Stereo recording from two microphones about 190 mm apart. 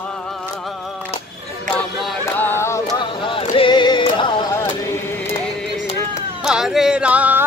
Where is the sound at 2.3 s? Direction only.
10° left (ahead or behind).